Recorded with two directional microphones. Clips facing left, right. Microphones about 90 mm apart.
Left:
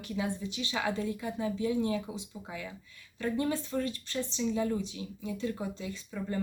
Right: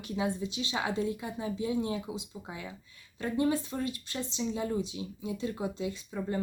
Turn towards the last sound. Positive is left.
turn(degrees=-20)  # may be behind; listen again after turning